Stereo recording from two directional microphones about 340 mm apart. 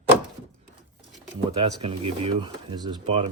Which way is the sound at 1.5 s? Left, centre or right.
Centre.